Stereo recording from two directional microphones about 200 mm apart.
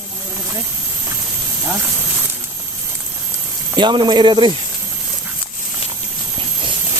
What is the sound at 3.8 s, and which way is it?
Speech, 20° right (ahead or behind).